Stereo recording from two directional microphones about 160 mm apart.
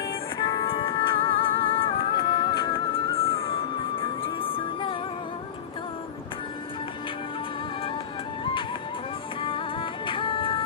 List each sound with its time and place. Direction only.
0.4 s music: 35° left (ahead or behind)
9.4 s music: 35° left (ahead or behind)